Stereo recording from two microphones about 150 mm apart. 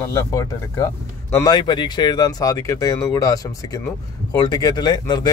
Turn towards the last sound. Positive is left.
turn(degrees=30)  # may be behind; listen again after turning